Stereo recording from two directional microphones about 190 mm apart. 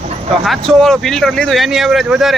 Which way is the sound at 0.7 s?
Centre (ahead or behind).